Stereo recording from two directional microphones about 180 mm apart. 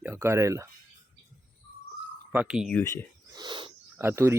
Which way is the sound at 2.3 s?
5° right (ahead or behind).